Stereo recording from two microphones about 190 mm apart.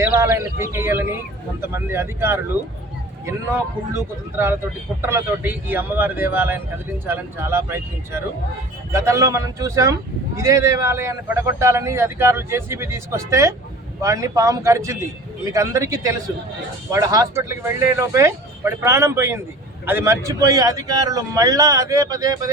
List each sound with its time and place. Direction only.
0.0 s a man's voice: 15° right (ahead or behind)